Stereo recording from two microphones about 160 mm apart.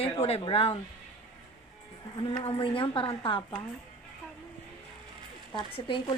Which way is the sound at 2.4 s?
35° left (ahead or behind).